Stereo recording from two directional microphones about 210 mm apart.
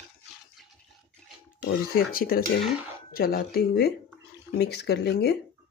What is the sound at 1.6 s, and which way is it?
Speech, 45° left (ahead or behind).